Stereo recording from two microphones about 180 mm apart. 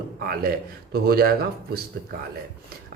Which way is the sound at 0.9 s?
60° right (ahead or behind).